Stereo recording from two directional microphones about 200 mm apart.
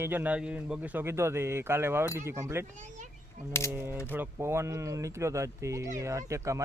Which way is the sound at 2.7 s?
35° right (ahead or behind).